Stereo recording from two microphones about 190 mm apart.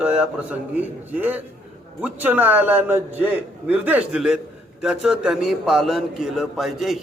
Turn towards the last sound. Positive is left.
turn(degrees=0)  # may be behind; listen again after turning